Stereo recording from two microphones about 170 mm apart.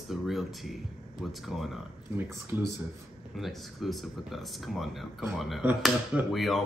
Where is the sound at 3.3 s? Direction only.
Centre (ahead or behind).